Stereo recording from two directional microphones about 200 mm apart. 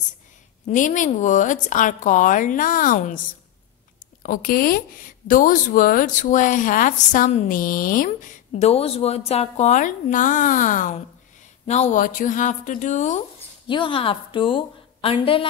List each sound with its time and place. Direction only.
0.7 s a woman's voice: 40° left (ahead or behind)
4.2 s a woman's voice: 45° left (ahead or behind)
13.7 s a woman's voice: 25° left (ahead or behind)